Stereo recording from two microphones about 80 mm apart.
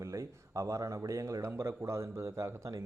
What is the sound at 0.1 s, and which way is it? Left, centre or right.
A man's voice, right.